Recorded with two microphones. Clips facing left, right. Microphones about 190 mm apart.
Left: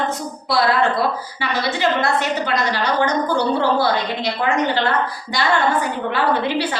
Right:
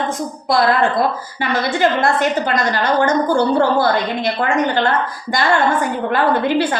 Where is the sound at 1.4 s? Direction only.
50° right (ahead or behind).